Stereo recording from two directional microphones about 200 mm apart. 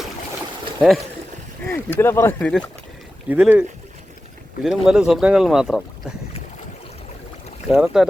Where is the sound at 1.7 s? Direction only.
10° left (ahead or behind).